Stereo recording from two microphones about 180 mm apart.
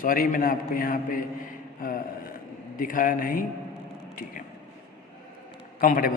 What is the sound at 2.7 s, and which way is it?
Speech, 50° left (ahead or behind).